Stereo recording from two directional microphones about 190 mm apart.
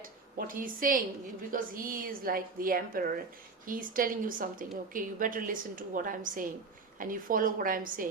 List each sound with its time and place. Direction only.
0.3 s a woman's voice: 45° right (ahead or behind)